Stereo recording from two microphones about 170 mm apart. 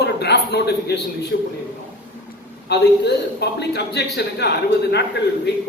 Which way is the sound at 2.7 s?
80° left.